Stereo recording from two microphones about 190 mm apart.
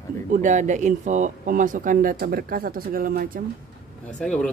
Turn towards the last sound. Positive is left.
turn(degrees=5)  # may be behind; listen again after turning